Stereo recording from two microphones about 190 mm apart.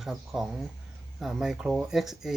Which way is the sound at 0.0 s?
Centre (ahead or behind).